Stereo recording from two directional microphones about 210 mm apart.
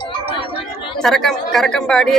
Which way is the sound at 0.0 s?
25° left (ahead or behind).